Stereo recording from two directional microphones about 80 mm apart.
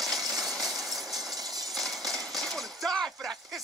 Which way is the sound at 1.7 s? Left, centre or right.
Centre.